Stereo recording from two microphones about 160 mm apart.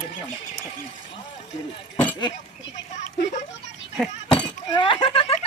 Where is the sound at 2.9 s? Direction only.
45° left (ahead or behind).